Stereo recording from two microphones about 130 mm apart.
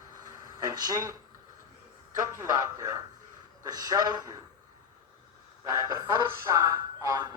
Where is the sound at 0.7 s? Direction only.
30° right (ahead or behind).